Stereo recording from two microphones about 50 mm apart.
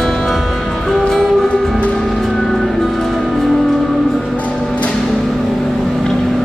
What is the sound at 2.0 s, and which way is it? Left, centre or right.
Music, centre.